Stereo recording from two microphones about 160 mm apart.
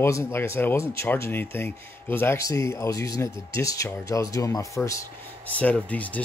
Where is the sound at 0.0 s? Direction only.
15° left (ahead or behind).